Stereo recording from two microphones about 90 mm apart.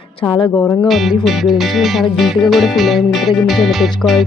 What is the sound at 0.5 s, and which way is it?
Music, 25° left (ahead or behind).